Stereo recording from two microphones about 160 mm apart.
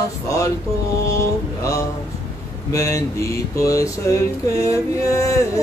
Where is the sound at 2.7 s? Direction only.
20° left (ahead or behind).